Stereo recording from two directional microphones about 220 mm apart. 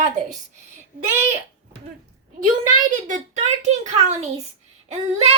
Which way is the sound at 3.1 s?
30° right (ahead or behind).